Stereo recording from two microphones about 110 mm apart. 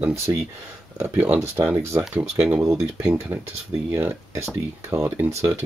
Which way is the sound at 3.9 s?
20° right (ahead or behind).